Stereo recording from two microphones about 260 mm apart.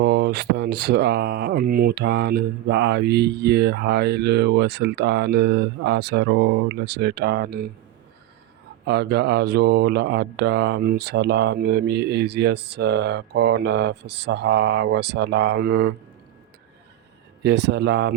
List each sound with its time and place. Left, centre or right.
0.0 s speech: right
8.9 s speech: right
17.4 s speech: right